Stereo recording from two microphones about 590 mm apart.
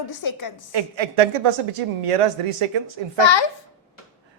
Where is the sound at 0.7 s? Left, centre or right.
Right.